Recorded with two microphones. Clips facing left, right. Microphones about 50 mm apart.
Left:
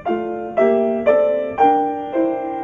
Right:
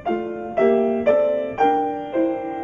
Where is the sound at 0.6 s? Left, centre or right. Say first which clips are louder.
Left 2 dB; centre.